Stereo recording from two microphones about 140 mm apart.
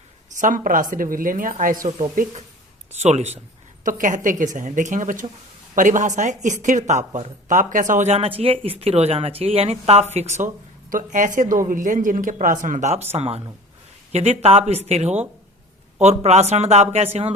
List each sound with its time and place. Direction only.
0.3 s a woman's voice: 70° right (ahead or behind)
3.0 s speech: 50° right (ahead or behind)
3.8 s a woman's voice: 70° right (ahead or behind)
13.1 s speech: 45° right (ahead or behind)